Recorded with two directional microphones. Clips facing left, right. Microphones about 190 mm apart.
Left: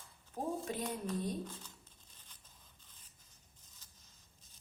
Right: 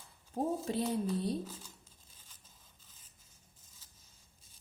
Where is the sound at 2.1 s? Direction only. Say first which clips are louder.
Even; 5° right (ahead or behind).